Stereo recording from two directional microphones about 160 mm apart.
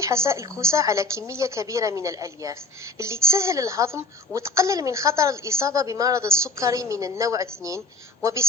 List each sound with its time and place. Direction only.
0.0 s a woman's voice: 15° right (ahead or behind)